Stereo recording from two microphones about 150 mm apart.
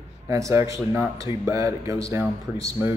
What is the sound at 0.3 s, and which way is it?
A man's voice, 20° right (ahead or behind).